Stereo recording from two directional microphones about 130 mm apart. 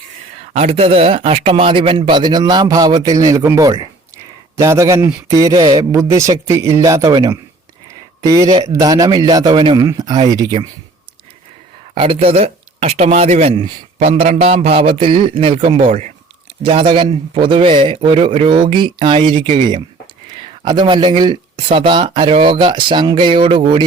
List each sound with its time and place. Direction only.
0.3 s a man's voice: 55° right (ahead or behind); by 10.7 s 30° right (ahead or behind)
11.9 s speech: 45° right (ahead or behind)
16.6 s speech: 40° right (ahead or behind)
20.7 s speech: 35° right (ahead or behind)